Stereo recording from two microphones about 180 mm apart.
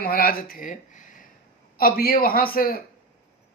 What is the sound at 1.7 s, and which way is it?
A man's voice, 55° left (ahead or behind).